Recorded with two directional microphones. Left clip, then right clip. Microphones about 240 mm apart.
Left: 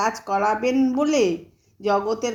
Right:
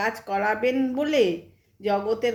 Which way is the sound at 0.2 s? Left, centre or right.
Centre.